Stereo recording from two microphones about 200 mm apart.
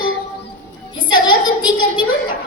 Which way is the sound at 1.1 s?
20° left (ahead or behind).